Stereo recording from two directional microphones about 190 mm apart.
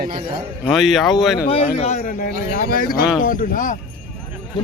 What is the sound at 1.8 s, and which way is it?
A man's voice, 35° left (ahead or behind).